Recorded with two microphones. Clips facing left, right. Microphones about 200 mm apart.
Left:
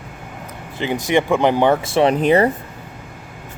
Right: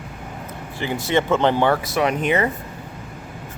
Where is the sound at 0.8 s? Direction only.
15° left (ahead or behind); by 2.5 s 35° left (ahead or behind).